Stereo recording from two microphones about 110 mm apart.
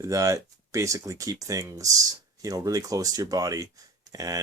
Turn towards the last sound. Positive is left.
turn(degrees=-35)  # may be behind; listen again after turning